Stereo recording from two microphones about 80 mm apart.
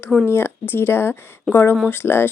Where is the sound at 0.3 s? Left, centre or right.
Left.